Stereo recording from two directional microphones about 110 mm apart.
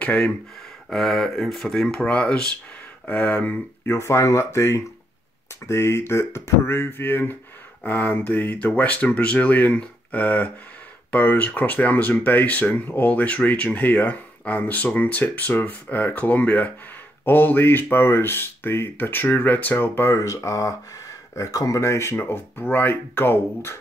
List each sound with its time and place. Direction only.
0.8 s speech: 5° left (ahead or behind)
20.2 s speech: 30° left (ahead or behind)